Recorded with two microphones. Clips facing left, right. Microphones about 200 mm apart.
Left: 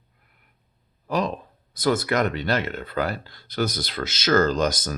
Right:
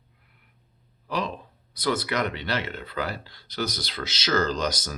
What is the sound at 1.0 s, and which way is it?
Speech, 45° left (ahead or behind).